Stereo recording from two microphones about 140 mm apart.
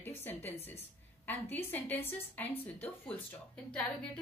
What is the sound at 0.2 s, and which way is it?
A woman's voice, 15° left (ahead or behind).